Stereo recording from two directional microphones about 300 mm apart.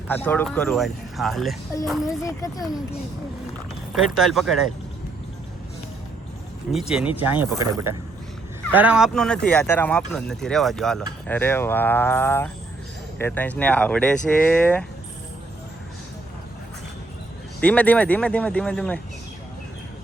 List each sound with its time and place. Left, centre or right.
0.1 s speech: centre
2.0 s speech: centre
3.9 s speech: centre
6.7 s speech: centre
17.6 s speech: centre